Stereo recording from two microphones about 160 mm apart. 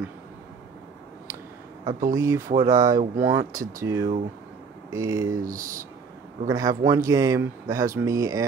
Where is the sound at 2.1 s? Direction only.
20° right (ahead or behind).